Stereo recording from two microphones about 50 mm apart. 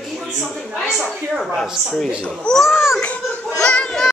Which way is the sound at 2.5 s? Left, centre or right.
Centre.